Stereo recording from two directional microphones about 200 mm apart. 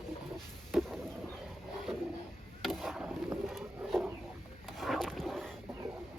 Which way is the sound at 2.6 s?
Centre (ahead or behind).